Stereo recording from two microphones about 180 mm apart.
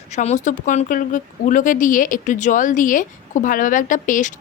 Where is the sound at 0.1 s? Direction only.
40° left (ahead or behind).